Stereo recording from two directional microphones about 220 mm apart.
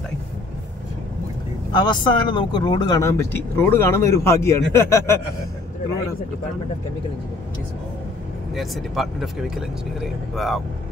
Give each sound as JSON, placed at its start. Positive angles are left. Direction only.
{"t": 1.7, "sound": "speech", "side_deg": 20}
{"t": 8.5, "sound": "speech", "side_deg": 0}